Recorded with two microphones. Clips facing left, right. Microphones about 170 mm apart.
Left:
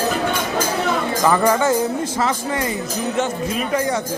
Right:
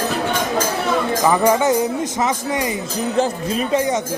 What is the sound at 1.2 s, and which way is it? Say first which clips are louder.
Speech: even; 15° right (ahead or behind).